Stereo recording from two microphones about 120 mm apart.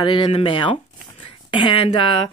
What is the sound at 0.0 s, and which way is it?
Speech, 40° left (ahead or behind).